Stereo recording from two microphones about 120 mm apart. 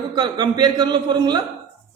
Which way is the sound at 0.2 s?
35° right (ahead or behind).